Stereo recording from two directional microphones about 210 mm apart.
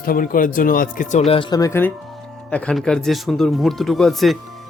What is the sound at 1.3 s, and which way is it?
Speech, 20° left (ahead or behind).